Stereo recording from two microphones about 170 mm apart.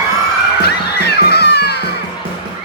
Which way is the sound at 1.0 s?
75° left (ahead or behind).